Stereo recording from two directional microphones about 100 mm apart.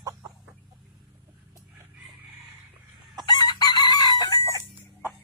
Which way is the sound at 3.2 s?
45° left (ahead or behind).